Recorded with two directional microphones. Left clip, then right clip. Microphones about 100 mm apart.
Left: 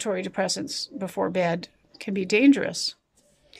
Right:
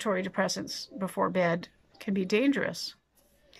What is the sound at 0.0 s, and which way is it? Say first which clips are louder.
A woman's voice: left 2 dB; 15° left (ahead or behind).